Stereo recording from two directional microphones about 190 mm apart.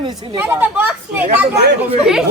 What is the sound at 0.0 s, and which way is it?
Speech, 20° right (ahead or behind).